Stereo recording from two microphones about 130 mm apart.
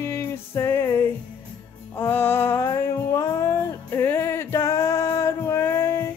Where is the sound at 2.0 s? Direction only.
15° left (ahead or behind).